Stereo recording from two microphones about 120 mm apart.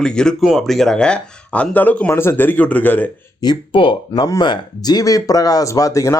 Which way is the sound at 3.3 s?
40° left (ahead or behind).